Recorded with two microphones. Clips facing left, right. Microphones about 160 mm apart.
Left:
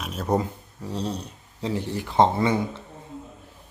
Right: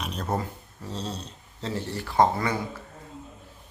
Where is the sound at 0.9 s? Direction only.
15° left (ahead or behind).